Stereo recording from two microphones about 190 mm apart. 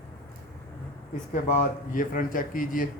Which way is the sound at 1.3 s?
40° left (ahead or behind).